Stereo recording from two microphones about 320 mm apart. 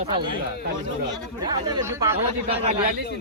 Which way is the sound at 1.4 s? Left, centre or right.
Centre.